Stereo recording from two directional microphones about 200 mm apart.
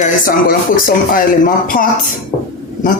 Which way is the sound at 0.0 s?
45° left (ahead or behind).